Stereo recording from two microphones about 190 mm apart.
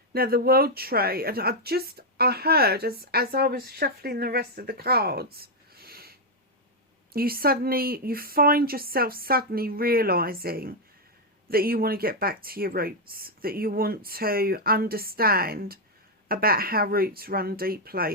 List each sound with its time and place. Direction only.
0.1 s speech: 55° right (ahead or behind)